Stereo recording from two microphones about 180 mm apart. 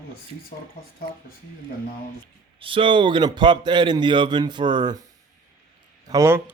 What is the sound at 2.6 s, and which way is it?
A man's voice, 30° right (ahead or behind).